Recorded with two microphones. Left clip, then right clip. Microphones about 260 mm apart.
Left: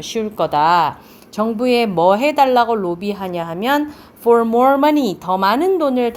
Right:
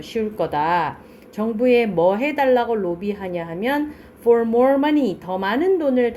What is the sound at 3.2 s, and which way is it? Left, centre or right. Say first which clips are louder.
Speech: left 3 dB; left.